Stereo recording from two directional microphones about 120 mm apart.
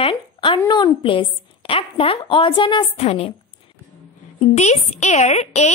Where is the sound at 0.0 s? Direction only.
45° left (ahead or behind).